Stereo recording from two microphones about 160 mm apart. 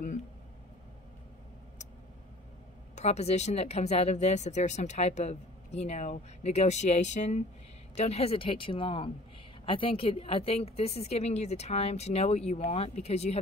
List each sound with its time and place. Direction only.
3.0 s a woman's voice: 40° left (ahead or behind)